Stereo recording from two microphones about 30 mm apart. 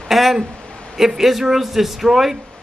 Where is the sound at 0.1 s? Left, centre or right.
Centre.